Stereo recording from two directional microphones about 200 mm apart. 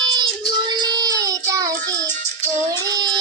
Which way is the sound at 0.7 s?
20° right (ahead or behind).